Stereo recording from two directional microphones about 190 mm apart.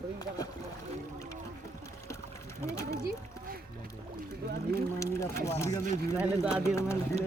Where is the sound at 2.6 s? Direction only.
15° left (ahead or behind).